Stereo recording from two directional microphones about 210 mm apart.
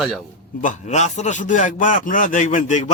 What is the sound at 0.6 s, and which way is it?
A man's voice, 35° left (ahead or behind).